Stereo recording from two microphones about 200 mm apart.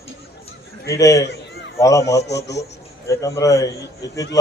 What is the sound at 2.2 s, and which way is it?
Speech, 60° left (ahead or behind).